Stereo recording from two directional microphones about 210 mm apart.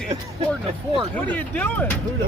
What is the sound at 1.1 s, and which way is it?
Speech, 10° left (ahead or behind).